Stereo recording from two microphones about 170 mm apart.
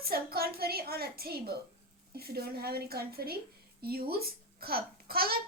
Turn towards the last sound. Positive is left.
turn(degrees=-60)  # may be behind; listen again after turning